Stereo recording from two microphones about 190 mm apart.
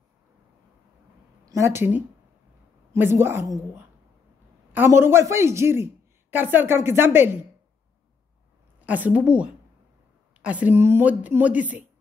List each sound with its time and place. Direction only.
1.4 s a woman's voice: 15° right (ahead or behind)
8.8 s a woman's voice: 10° right (ahead or behind)